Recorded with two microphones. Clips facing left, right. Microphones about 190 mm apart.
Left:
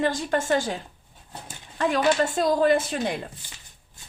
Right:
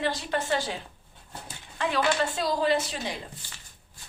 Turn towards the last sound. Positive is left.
turn(degrees=50)  # may be behind; listen again after turning